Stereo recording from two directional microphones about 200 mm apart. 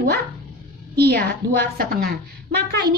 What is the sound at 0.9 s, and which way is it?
A woman's voice, 55° right (ahead or behind).